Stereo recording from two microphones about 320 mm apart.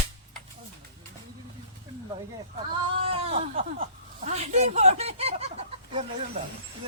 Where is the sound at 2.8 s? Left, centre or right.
Centre.